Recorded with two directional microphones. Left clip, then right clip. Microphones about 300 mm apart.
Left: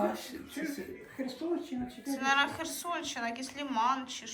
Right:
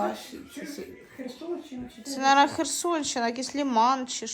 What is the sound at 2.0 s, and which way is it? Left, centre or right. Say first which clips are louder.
A woman's voice: right 8 dB; centre.